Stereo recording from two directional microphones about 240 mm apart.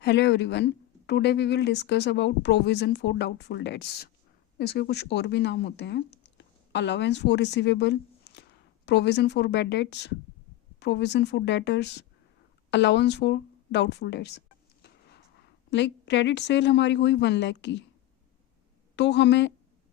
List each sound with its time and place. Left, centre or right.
0.0 s speech: left
18.9 s speech: left